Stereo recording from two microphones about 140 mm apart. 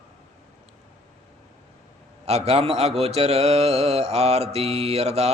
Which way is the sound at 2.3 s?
50° right (ahead or behind).